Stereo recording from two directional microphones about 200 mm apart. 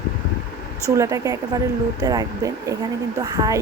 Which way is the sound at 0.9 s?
15° right (ahead or behind).